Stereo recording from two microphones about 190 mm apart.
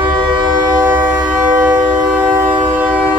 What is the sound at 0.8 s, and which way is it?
Train, 10° right (ahead or behind).